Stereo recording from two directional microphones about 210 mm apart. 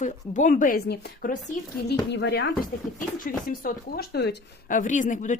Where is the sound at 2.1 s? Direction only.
55° left (ahead or behind).